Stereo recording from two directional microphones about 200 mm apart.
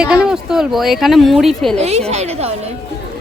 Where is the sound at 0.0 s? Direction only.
5° right (ahead or behind).